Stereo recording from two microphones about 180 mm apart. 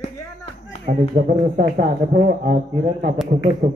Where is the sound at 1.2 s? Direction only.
55° right (ahead or behind).